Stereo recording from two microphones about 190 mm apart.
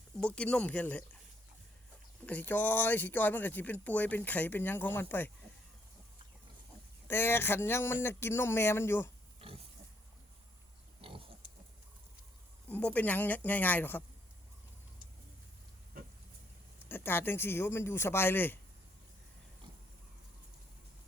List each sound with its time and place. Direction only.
0.2 s speech: 5° left (ahead or behind)
2.2 s speech: 10° left (ahead or behind)
7.1 s speech: 10° left (ahead or behind)
11.0 s pig: 30° right (ahead or behind)
12.6 s speech: 10° left (ahead or behind)
16.9 s speech: 10° left (ahead or behind)